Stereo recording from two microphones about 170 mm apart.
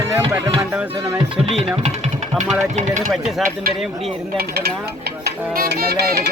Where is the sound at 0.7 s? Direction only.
10° right (ahead or behind).